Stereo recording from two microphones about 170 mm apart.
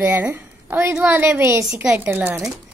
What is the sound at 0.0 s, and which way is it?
Speech, 10° right (ahead or behind).